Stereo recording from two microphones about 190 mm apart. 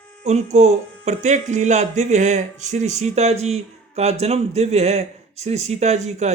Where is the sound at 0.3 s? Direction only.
35° right (ahead or behind).